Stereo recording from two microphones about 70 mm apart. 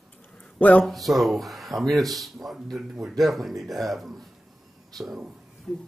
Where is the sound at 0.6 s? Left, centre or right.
Left.